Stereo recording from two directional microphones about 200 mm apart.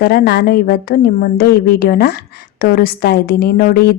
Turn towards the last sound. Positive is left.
turn(degrees=50)  # may be behind; listen again after turning